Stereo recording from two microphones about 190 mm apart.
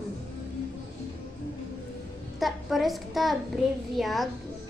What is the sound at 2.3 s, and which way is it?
A child's voice, centre (ahead or behind).